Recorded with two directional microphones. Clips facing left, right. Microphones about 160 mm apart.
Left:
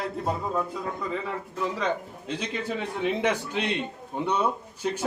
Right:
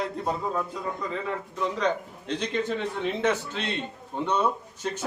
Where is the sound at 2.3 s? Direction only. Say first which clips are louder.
Right 3 dB; 10° left (ahead or behind).